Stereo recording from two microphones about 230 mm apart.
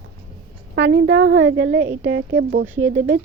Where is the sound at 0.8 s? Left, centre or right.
Right.